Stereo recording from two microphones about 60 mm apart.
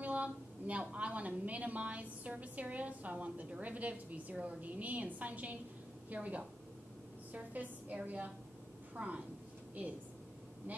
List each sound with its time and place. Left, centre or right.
0.0 s a woman's voice: right